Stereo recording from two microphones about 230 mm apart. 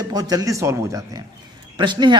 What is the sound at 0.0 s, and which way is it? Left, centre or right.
A man's voice, centre.